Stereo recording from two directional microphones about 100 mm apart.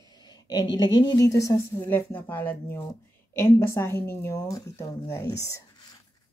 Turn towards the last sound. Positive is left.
turn(degrees=30)  # may be behind; listen again after turning